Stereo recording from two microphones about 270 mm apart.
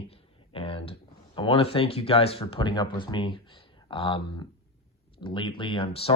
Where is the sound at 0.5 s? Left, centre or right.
Centre.